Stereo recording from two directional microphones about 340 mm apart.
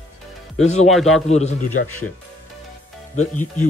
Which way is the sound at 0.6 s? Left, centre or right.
Centre.